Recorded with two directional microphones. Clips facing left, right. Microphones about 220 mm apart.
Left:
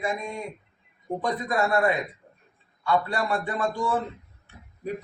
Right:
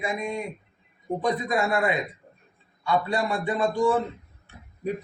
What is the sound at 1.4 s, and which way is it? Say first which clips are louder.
A man's voice: left 5 dB; 15° right (ahead or behind).